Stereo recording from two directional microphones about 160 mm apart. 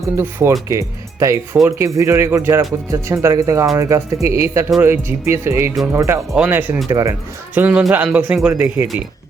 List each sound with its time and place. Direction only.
0.2 s speech: 15° right (ahead or behind)